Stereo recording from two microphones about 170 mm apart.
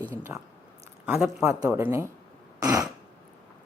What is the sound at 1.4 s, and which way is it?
Speech, 15° right (ahead or behind).